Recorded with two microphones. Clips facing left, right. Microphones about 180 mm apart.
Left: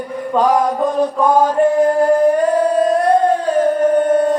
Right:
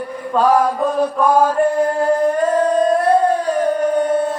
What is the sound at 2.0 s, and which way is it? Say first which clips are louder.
Singing: left 3 dB; 10° left (ahead or behind).